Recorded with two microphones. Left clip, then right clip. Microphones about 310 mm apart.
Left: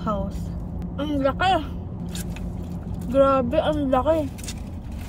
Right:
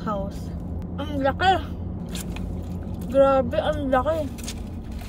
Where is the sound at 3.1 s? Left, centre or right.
Centre.